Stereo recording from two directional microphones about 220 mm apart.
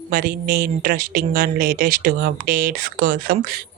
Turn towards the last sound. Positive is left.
turn(degrees=-40)  # may be behind; listen again after turning